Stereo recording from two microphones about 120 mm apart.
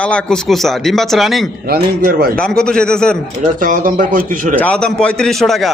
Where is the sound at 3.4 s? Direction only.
90° right.